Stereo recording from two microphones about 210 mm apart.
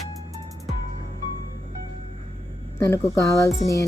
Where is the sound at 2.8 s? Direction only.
15° left (ahead or behind).